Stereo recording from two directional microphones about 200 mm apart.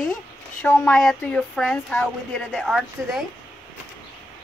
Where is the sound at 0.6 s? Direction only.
5° left (ahead or behind).